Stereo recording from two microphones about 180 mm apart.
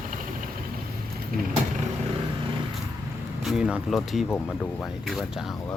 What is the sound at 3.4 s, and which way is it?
Speech, 5° right (ahead or behind).